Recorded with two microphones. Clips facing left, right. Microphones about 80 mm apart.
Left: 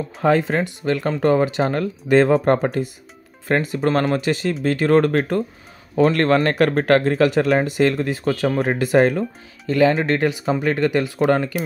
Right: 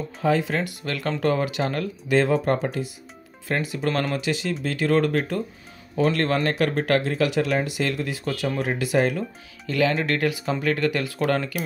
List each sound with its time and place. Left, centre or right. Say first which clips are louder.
0.2 s speech: left 5 dB; left
0.6 s speech: left 7 dB; left
9.7 s speech: left 6 dB; left